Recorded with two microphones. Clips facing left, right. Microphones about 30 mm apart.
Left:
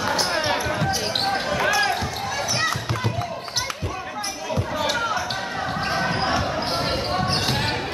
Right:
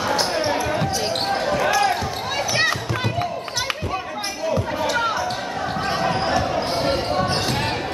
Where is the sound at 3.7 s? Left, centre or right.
Right.